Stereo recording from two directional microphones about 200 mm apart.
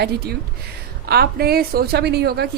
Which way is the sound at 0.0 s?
50° right (ahead or behind).